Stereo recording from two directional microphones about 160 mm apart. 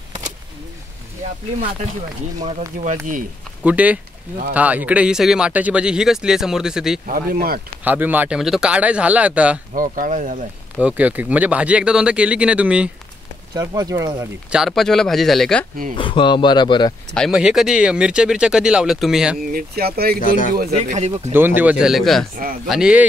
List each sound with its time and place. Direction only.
2.8 s speech: 55° right (ahead or behind)
3.6 s speech: 10° right (ahead or behind)
7.1 s speech: 70° right (ahead or behind)
7.8 s speech: 10° right (ahead or behind)
9.8 s speech: 55° right (ahead or behind)
10.8 s speech: 10° right (ahead or behind)
13.6 s speech: 25° right (ahead or behind)
14.5 s speech: centre (ahead or behind)
16.0 s speech: 30° left (ahead or behind)
17.1 s speech: centre (ahead or behind)
19.5 s speech: 75° right (ahead or behind)
20.2 s speech: 55° left (ahead or behind)
20.7 s speech: 45° right (ahead or behind)
21.3 s speech: 15° right (ahead or behind)